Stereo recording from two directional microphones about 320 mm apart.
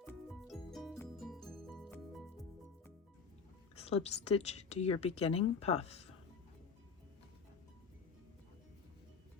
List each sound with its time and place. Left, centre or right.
0.0 s music: centre
3.8 s a woman's voice: centre